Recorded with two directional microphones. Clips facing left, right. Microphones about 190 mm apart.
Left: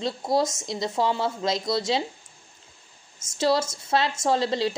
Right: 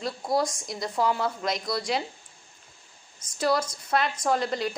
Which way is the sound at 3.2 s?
25° left (ahead or behind).